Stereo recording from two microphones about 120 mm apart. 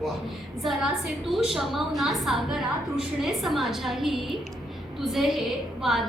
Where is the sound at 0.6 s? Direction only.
Centre (ahead or behind).